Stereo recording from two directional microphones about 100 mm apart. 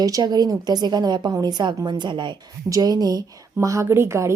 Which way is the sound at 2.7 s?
40° right (ahead or behind).